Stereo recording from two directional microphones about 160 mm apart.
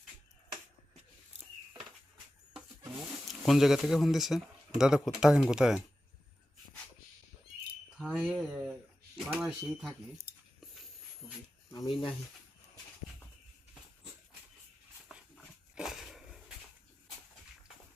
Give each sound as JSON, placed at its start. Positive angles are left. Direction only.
{"t": 3.1, "sound": "speech", "side_deg": 0}
{"t": 7.9, "sound": "speech", "side_deg": 0}
{"t": 11.7, "sound": "speech", "side_deg": 30}
{"t": 15.7, "sound": "a sound", "side_deg": -5}